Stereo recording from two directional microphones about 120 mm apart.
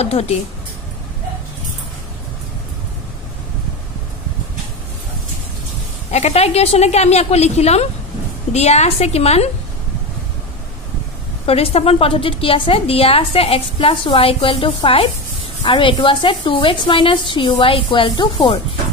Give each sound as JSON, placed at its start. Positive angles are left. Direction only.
{"t": 0.0, "sound": "a woman's voice", "side_deg": 60}
{"t": 6.1, "sound": "a woman's voice", "side_deg": 65}
{"t": 11.4, "sound": "a woman's voice", "side_deg": 55}